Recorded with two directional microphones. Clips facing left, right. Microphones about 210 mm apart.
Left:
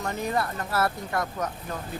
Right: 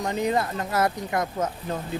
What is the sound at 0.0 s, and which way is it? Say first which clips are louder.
Speech: right 4 dB; 20° right (ahead or behind).